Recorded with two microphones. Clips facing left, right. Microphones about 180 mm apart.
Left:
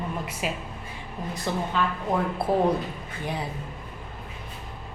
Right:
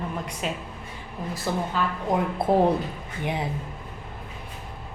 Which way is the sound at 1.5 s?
5° right (ahead or behind).